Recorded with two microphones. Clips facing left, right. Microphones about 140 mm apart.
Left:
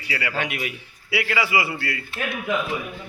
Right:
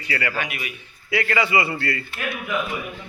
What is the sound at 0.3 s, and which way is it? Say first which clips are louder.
Speech: left 2 dB; 85° left.